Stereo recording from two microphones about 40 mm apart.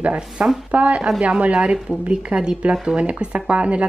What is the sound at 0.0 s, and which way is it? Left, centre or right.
Speech, right.